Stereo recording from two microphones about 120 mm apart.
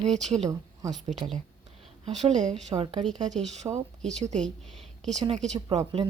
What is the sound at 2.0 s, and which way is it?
Speech, 80° right.